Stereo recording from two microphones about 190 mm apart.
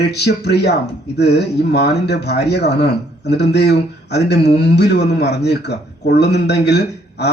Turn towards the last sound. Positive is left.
turn(degrees=60)  # may be behind; listen again after turning